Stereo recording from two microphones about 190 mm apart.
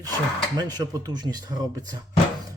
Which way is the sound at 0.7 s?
20° right (ahead or behind).